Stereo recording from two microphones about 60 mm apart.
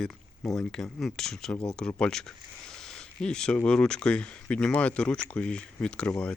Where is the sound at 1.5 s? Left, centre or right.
Left.